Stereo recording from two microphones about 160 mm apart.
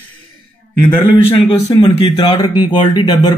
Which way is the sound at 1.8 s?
30° left (ahead or behind).